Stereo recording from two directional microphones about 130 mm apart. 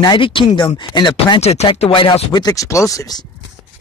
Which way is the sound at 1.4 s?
55° left (ahead or behind).